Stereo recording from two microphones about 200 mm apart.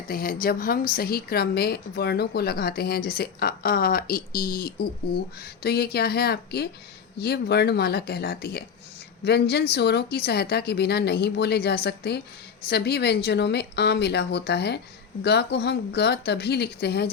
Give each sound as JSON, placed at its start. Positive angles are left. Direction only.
{"t": 0.1, "sound": "speech", "side_deg": 45}